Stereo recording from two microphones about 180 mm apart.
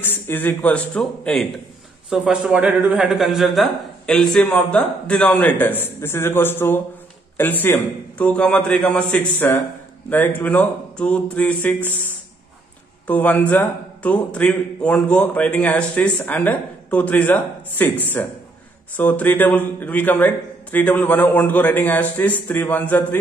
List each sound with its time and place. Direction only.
0.0 s a man's voice: 10° left (ahead or behind)